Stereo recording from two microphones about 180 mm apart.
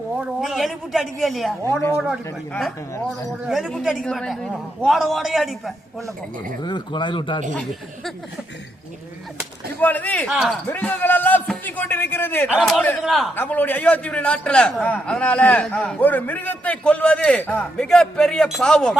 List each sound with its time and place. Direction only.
0.2 s a man's voice: centre (ahead or behind)
6.6 s speech: 25° left (ahead or behind)
7.5 s a man's voice: 5° left (ahead or behind)
9.8 s a man's voice: 10° left (ahead or behind)
10.2 s a man's voice: 5° right (ahead or behind)
10.7 s a man's voice: 10° left (ahead or behind)
12.5 s a man's voice: 5° right (ahead or behind)
13.3 s a man's voice: 10° left (ahead or behind)